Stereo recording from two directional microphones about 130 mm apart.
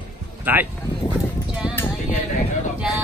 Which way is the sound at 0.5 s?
15° right (ahead or behind).